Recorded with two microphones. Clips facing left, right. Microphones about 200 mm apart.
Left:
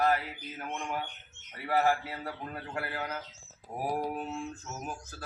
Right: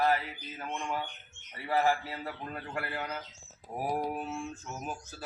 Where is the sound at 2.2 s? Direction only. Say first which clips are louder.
Even; 5° left (ahead or behind).